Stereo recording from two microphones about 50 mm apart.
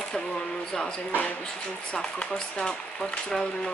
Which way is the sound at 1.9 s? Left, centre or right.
Centre.